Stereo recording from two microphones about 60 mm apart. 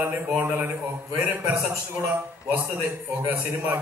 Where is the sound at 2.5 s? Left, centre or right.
Right.